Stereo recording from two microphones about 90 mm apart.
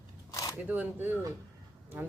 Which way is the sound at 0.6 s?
20° right (ahead or behind).